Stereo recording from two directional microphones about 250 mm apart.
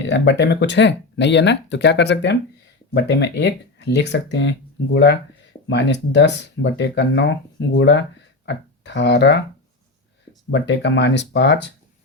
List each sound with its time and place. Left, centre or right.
0.1 s speech: left
10.5 s speech: left